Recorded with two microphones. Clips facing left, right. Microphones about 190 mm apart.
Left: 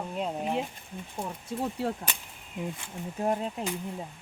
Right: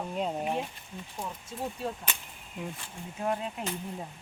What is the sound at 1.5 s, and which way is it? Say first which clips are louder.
Speech: left 5 dB; 70° left (ahead or behind).